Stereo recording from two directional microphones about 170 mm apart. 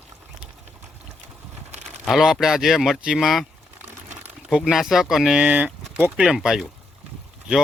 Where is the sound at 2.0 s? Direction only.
Centre (ahead or behind).